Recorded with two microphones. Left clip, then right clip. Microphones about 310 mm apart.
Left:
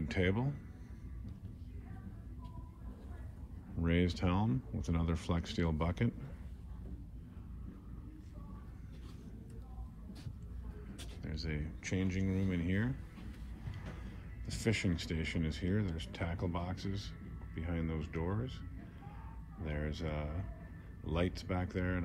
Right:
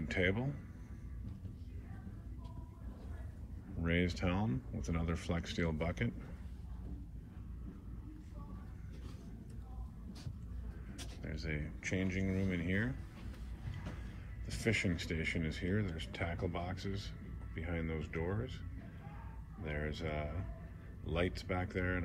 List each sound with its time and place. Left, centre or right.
0.1 s speech: centre
3.8 s speech: centre
11.0 s speech: centre
14.6 s speech: centre
19.6 s speech: centre